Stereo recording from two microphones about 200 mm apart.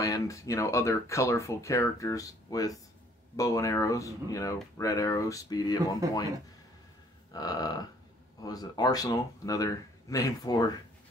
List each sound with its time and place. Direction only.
0.0 s speech: 15° left (ahead or behind)
7.3 s a sound: 20° left (ahead or behind)
8.5 s speech: 20° left (ahead or behind)